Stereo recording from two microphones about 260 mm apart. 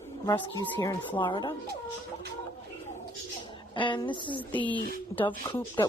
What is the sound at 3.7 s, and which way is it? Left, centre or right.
Speech, centre.